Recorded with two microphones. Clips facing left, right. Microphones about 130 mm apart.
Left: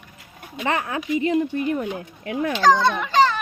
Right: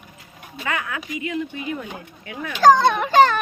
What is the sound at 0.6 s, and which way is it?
Speech, 35° left (ahead or behind).